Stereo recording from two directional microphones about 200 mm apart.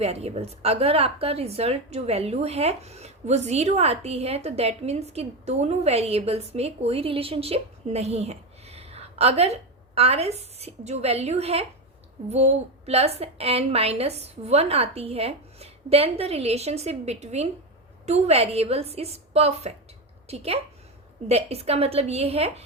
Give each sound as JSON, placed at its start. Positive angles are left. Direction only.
{"t": 0.0, "sound": "speech", "side_deg": -30}